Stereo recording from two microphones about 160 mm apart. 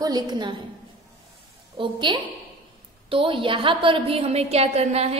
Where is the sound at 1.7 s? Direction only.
30° right (ahead or behind).